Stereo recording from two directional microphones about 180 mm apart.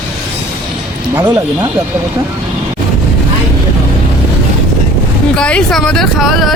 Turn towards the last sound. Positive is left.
turn(degrees=0)  # may be behind; listen again after turning